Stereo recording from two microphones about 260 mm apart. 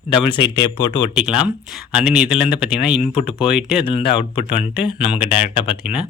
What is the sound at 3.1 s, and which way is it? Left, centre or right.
Speech, centre.